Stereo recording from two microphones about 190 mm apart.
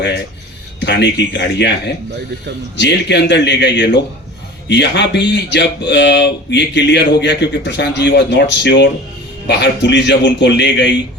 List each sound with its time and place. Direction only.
0.8 s speech: 65° left (ahead or behind)
2.7 s speech: 65° left (ahead or behind)